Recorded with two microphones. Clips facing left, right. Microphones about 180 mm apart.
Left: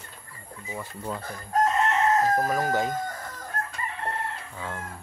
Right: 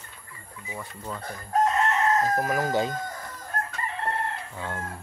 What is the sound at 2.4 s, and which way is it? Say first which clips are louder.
Speech: left 1 dB; 5° right (ahead or behind).